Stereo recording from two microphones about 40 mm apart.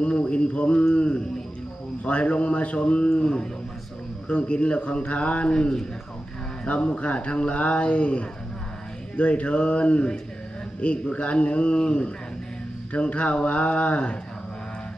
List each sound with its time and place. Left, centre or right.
0.0 s a man's voice: left
5.5 s a man's voice: centre